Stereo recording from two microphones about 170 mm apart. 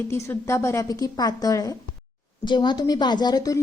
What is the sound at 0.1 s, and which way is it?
A woman's voice, 15° left (ahead or behind).